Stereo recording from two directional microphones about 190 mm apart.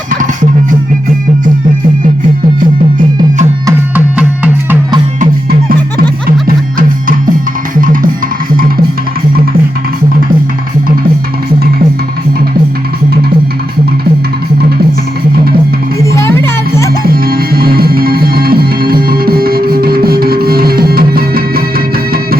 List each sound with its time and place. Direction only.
3.7 s music: 10° right (ahead or behind)
5.2 s music: 50° right (ahead or behind)
6.7 s music: 45° right (ahead or behind)
16.0 s music: 15° left (ahead or behind)
17.0 s music: 50° right (ahead or behind)